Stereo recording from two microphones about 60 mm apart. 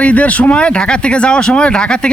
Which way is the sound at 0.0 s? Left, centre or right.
Left.